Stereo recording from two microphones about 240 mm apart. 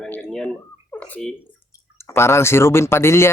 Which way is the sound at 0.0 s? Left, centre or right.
Centre.